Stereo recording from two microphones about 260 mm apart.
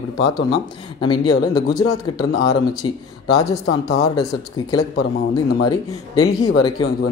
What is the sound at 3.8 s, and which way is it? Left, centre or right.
Speech, centre.